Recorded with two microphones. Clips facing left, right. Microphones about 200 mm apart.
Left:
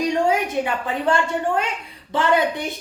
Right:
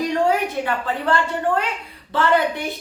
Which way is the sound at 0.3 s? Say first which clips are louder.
Even; 15° left (ahead or behind).